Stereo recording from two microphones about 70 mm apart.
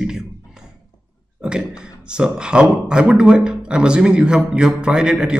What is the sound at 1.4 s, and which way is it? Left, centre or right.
Speech, centre.